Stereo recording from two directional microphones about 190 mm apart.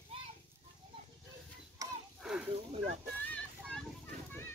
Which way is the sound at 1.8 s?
20° right (ahead or behind).